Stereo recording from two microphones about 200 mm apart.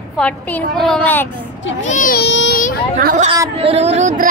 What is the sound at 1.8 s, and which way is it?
Speech, 40° left (ahead or behind).